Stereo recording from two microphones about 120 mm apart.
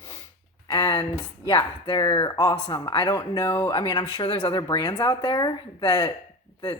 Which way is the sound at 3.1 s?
25° left (ahead or behind).